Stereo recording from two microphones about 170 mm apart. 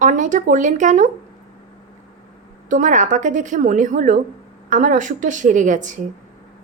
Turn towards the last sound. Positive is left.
turn(degrees=-45)  # may be behind; listen again after turning